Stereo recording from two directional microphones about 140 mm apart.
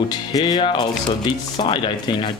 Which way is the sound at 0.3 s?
25° left (ahead or behind).